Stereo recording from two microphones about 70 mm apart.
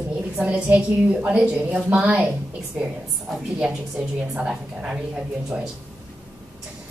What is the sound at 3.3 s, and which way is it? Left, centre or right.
A woman's voice, centre.